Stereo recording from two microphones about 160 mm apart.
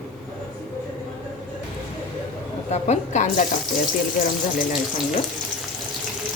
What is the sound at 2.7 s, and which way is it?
Speech, 45° left (ahead or behind).